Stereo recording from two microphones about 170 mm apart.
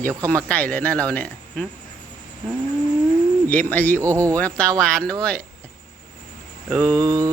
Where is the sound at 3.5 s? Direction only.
10° left (ahead or behind).